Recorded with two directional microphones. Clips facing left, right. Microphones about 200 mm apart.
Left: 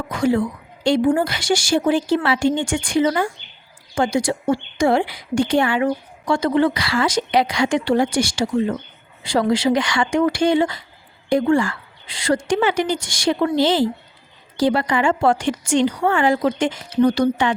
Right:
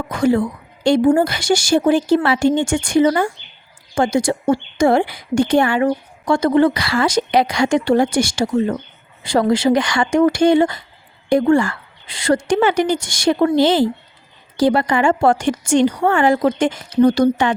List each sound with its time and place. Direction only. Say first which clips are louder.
0.1 s a woman's voice: right 3 dB; 50° right (ahead or behind)